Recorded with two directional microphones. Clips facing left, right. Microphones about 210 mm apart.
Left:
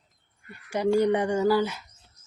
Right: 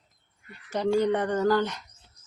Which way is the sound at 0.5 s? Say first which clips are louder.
Left 2 dB; 10° left (ahead or behind).